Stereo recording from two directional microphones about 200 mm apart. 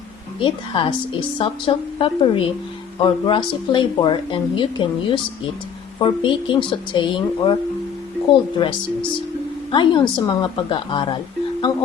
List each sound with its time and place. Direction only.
0.3 s speech: 25° left (ahead or behind)
8.5 s speech: 25° left (ahead or behind)